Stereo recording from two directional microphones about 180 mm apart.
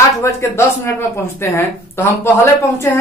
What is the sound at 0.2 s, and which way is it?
Speech, 15° left (ahead or behind).